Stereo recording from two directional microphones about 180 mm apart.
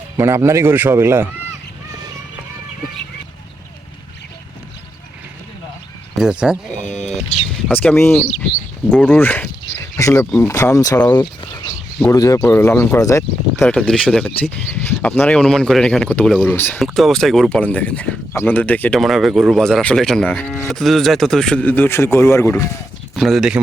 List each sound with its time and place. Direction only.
0.2 s a man's voice: 15° right (ahead or behind)
6.1 s speech: 5° right (ahead or behind)
6.8 s speech: 40° left (ahead or behind)
7.7 s speech: 10° left (ahead or behind)
11.1 s a sound: 25° left (ahead or behind)
12.0 s speech: 20° left (ahead or behind)
13.7 s speech: 5° left (ahead or behind)
23.1 s speech: centre (ahead or behind)